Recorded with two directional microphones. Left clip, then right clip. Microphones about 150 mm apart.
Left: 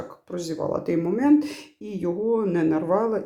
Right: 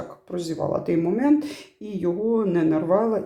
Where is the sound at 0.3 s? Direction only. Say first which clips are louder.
Right 1 dB; 15° left (ahead or behind).